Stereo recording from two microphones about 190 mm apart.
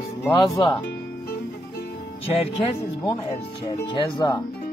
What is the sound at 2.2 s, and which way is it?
Speech, 30° left (ahead or behind).